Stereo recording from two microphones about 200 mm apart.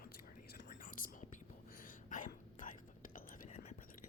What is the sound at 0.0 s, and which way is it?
Whispering, 50° left (ahead or behind).